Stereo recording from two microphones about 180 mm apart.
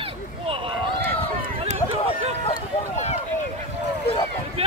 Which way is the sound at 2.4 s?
35° left (ahead or behind).